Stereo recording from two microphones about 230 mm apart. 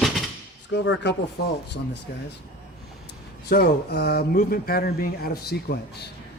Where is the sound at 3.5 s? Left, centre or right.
Left.